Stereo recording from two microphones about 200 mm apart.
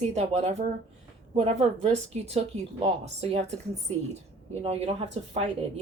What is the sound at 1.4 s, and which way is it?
A woman's voice, 30° right (ahead or behind).